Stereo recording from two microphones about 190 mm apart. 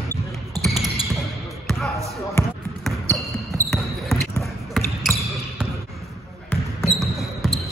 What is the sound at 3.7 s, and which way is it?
Basketball bounce, centre (ahead or behind).